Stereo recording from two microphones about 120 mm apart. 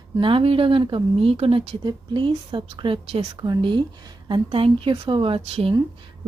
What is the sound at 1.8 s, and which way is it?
A woman's voice, 40° right (ahead or behind).